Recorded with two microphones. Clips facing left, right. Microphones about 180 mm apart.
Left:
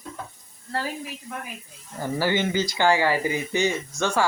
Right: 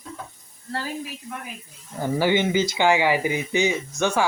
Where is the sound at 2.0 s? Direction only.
15° right (ahead or behind).